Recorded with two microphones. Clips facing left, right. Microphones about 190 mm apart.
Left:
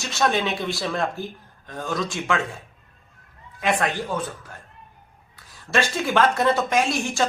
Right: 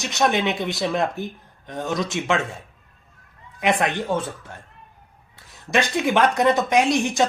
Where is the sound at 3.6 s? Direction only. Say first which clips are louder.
Right 2 dB; 20° right (ahead or behind).